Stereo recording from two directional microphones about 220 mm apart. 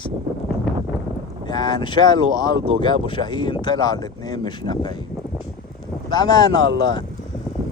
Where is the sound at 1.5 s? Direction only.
20° left (ahead or behind).